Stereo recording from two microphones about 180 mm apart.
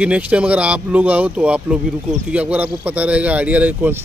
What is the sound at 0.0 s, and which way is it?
Speech, 5° right (ahead or behind).